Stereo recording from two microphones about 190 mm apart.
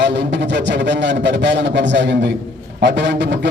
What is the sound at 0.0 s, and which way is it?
A man's voice, 65° right (ahead or behind).